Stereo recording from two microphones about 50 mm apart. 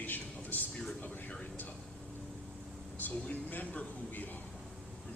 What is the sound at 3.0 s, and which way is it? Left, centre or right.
A man's voice, left.